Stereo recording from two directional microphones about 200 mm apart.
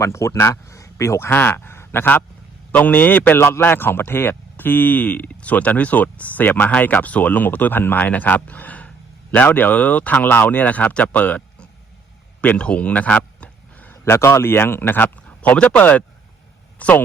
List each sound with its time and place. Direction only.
0.0 s a man's voice: 15° left (ahead or behind)